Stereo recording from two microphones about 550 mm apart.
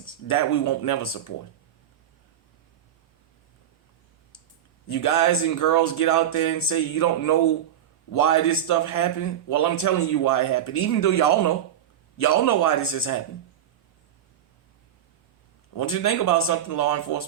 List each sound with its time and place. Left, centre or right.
0.0 s speech: left
4.9 s a man's voice: left
15.7 s a man's voice: left